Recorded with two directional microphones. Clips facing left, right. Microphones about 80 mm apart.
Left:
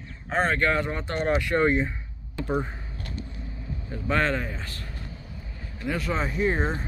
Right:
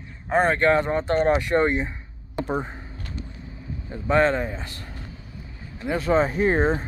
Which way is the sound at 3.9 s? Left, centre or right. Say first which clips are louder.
Right 5 dB; right.